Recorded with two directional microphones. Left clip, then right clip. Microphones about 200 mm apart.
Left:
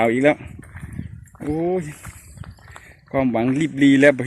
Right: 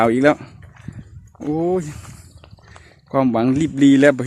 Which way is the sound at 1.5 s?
20° right (ahead or behind).